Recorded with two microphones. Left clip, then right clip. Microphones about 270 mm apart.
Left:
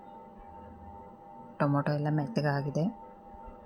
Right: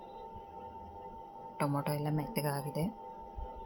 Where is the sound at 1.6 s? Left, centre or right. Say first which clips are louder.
Left 5 dB; centre.